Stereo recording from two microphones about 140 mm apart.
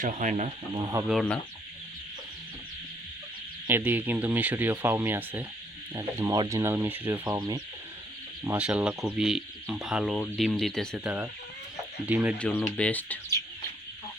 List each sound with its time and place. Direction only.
0.0 s speech: 65° right (ahead or behind)
1.0 s speech: 5° left (ahead or behind)
3.7 s speech: 15° right (ahead or behind)
7.3 s speech: 25° right (ahead or behind)
8.4 s speech: 10° right (ahead or behind)
12.0 s speech: 10° right (ahead or behind)
12.4 s speech: 15° left (ahead or behind)